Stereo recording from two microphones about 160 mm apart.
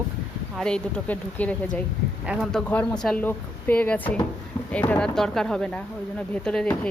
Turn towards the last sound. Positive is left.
turn(degrees=5)  # may be behind; listen again after turning